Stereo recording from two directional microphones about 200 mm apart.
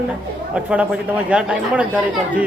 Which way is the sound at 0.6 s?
5° right (ahead or behind).